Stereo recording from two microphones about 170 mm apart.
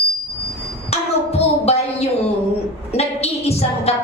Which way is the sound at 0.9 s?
35° left (ahead or behind).